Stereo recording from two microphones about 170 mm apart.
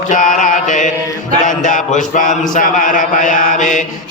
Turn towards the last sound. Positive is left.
turn(degrees=50)  # may be behind; listen again after turning